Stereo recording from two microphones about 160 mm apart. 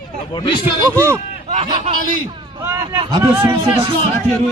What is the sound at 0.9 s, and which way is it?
Speech, 15° right (ahead or behind).